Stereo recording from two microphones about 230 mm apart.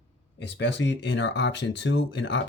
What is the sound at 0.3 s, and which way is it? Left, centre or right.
Speech, left.